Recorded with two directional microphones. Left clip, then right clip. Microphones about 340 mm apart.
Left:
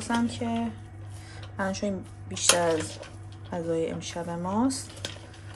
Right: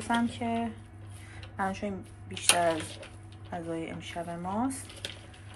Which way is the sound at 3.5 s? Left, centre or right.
Centre.